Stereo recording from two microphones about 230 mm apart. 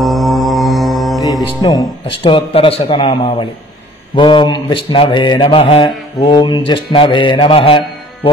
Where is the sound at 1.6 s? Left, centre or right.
Centre.